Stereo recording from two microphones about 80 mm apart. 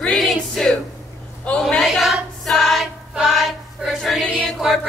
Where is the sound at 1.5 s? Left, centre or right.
Centre.